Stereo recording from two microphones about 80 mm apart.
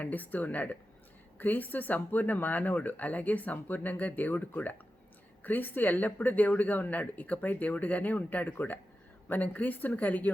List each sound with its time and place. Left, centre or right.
0.0 s speech: left